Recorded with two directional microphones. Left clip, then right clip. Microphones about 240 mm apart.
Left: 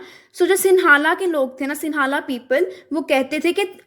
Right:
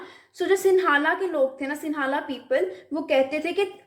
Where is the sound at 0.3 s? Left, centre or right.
Left.